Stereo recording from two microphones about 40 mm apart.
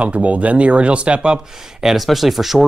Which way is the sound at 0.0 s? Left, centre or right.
Right.